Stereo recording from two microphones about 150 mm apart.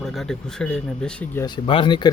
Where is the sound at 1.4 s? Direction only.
30° left (ahead or behind).